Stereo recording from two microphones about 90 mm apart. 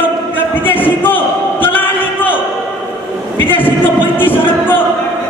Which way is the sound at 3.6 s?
20° left (ahead or behind).